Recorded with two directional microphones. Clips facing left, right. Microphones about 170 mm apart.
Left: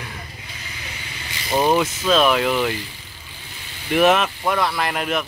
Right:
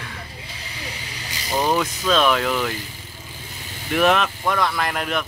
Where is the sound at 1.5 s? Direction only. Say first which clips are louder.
Left 3 dB; 20° left (ahead or behind).